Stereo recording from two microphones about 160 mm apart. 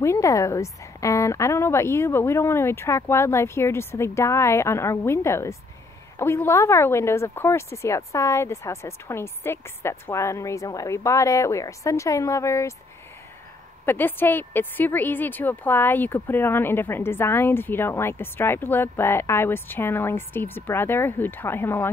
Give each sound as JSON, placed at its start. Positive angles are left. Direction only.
{"t": 0.0, "sound": "a woman's voice", "side_deg": 20}
{"t": 13.8, "sound": "a woman's voice", "side_deg": 10}